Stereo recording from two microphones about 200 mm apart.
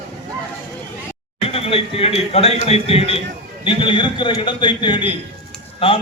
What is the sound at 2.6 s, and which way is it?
A man's voice, 30° left (ahead or behind).